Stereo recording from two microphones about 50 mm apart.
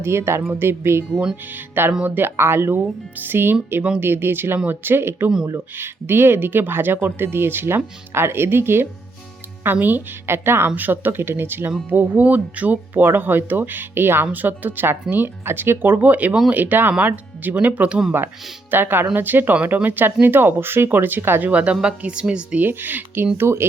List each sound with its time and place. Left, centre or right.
0.0 s speech: right
0.4 s speech: right
1.5 s speech: right
2.3 s speech: right
9.7 s speech: right
10.2 s speech: right
10.8 s speech: right
18.7 s speech: right
21.5 s speech: right
22.6 s speech: right
23.4 s speech: right